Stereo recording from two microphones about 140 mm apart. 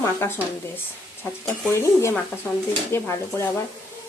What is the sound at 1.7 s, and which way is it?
Stir, 20° left (ahead or behind).